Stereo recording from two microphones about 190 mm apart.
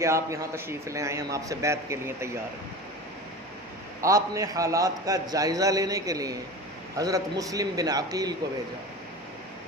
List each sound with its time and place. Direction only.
0.0 s a man's voice: 15° right (ahead or behind)
4.0 s a man's voice: 15° right (ahead or behind)